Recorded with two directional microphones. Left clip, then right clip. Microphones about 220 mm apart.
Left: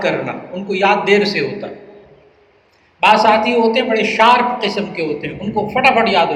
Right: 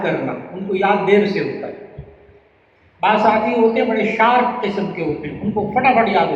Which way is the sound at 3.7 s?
45° left (ahead or behind).